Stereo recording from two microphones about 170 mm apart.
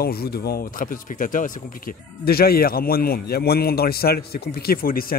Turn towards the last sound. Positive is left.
turn(degrees=60)  # may be behind; listen again after turning